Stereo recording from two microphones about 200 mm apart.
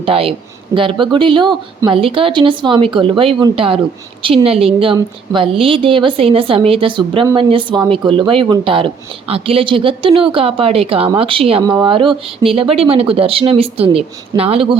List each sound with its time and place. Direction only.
0.0 s speech: 30° right (ahead or behind)